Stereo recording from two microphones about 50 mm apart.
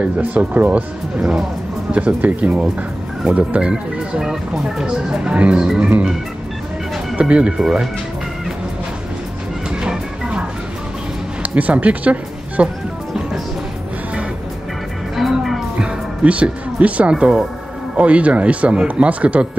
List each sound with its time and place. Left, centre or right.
0.0 s a man's voice: right
4.2 s speech: centre
7.2 s a man's voice: right
7.5 s speech: centre
9.7 s music: centre
11.5 s speech: right
15.1 s music: centre
15.8 s a man's voice: right